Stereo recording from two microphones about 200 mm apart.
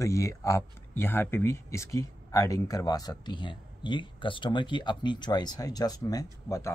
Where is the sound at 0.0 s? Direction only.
15° left (ahead or behind).